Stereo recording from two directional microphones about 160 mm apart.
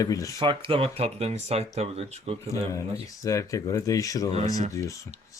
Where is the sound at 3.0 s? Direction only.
20° left (ahead or behind).